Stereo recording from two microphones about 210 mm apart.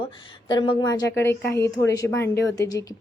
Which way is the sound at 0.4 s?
25° left (ahead or behind).